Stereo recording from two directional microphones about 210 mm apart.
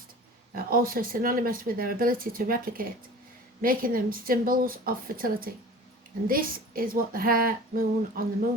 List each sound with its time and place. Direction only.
0.5 s speech: 45° right (ahead or behind)